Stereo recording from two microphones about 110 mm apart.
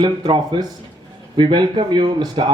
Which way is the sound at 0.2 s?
55° right (ahead or behind).